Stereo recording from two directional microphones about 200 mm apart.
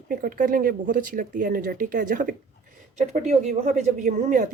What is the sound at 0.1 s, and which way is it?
A woman's voice, 45° right (ahead or behind).